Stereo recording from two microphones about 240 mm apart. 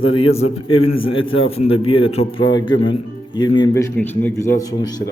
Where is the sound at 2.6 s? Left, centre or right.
Left.